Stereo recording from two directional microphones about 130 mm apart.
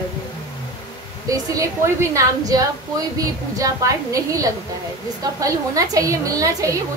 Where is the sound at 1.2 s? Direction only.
25° right (ahead or behind).